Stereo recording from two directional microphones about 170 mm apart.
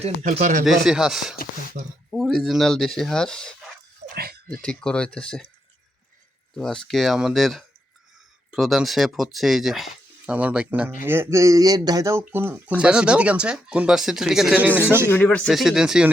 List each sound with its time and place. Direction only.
0.0 s speech: 45° right (ahead or behind)
0.6 s speech: centre (ahead or behind)
4.1 s a sound: 60° right (ahead or behind)
4.6 s speech: 5° left (ahead or behind)
6.6 s speech: 5° left (ahead or behind)
15.1 s speech: 10° left (ahead or behind)
15.4 s speech: centre (ahead or behind)